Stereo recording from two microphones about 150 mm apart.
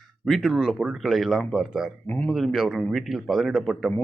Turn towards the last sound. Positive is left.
turn(degrees=0)  # may be behind; listen again after turning